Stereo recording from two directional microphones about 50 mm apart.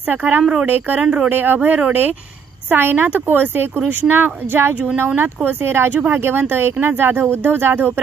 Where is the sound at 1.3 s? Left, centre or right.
Right.